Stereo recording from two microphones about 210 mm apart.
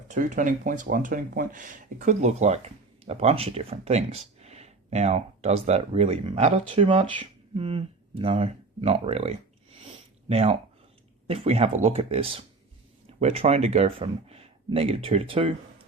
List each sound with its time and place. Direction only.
0.1 s speech: 35° right (ahead or behind)
9.7 s a sound: 25° right (ahead or behind)
11.3 s speech: 30° right (ahead or behind)